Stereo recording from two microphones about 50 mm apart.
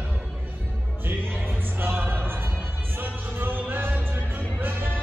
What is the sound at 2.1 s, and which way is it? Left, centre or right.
Music, right.